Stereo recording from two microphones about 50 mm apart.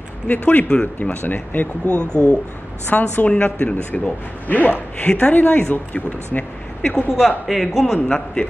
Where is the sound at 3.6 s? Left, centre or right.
Left.